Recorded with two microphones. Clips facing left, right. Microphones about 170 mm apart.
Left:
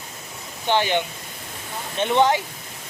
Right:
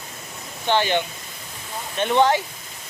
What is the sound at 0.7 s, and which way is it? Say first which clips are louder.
Speech: even; 15° left (ahead or behind).